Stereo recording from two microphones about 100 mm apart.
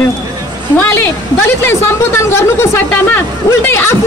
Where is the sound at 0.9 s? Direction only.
25° left (ahead or behind).